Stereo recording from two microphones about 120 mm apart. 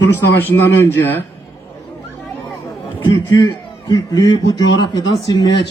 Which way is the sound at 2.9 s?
30° left (ahead or behind).